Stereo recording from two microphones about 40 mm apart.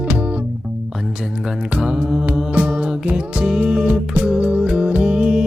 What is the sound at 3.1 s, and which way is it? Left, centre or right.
Music, right.